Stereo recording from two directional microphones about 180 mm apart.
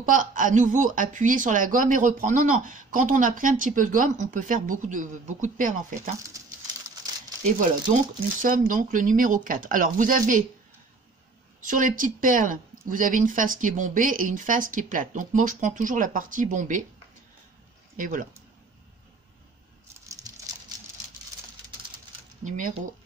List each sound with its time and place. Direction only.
0.0 s speech: 45° right (ahead or behind)
8.4 s speech: 50° right (ahead or behind)
11.6 s speech: 50° right (ahead or behind)
17.9 s speech: 50° right (ahead or behind)
22.4 s speech: 40° right (ahead or behind)